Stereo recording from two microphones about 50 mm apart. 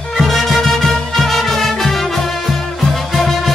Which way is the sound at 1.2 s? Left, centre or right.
Centre.